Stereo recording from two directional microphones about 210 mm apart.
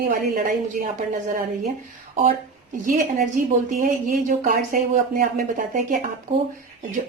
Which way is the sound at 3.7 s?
40° right (ahead or behind).